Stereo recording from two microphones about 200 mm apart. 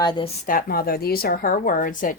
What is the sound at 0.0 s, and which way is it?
Speech, 20° left (ahead or behind).